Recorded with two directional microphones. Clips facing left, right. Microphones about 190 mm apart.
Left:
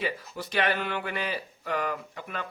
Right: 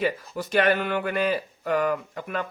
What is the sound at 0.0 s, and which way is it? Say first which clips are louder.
Speech: right 6 dB; 45° right (ahead or behind).